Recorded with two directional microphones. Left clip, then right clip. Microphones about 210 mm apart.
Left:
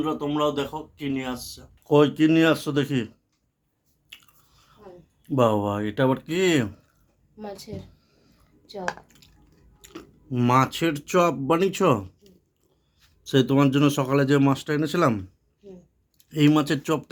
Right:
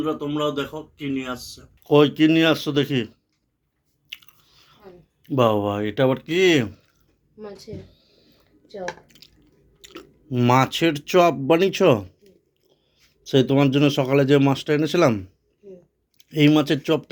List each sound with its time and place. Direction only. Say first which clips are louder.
0.0 s speech: even; 20° left (ahead or behind)
1.8 s speech: right 3 dB; 5° right (ahead or behind)
4.1 s chewing: right 8 dB; centre (ahead or behind)
5.2 s speech: right 2 dB; centre (ahead or behind)
7.9 s a sound: right 6 dB; centre (ahead or behind)
9.0 s drip: right 6 dB; 5° right (ahead or behind)
9.8 s speech: right 2 dB; 5° right (ahead or behind)